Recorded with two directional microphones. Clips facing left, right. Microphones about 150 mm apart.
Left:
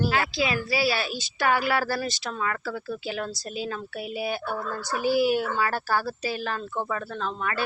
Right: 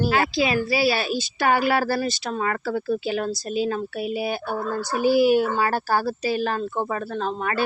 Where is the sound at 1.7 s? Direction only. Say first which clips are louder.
Right 4 dB; 40° right (ahead or behind).